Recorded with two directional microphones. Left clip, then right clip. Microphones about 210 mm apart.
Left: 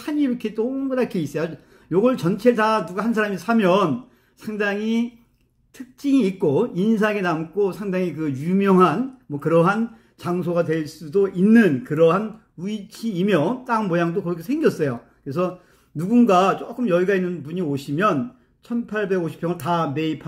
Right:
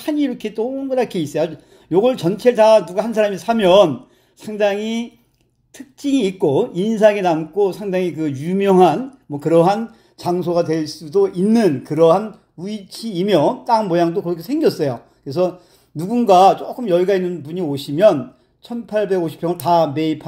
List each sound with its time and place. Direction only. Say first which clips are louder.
0.0 s speech: right 3 dB; centre (ahead or behind)